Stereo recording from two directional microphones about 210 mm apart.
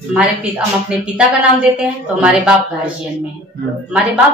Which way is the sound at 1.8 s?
5° right (ahead or behind).